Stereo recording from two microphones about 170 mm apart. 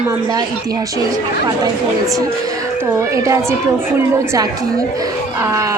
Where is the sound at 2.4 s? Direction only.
20° right (ahead or behind).